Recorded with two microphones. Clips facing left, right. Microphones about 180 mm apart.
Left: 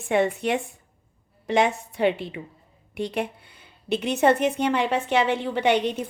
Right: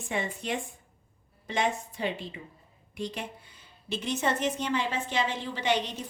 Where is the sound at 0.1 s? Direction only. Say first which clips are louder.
Left 10 dB; 70° left (ahead or behind).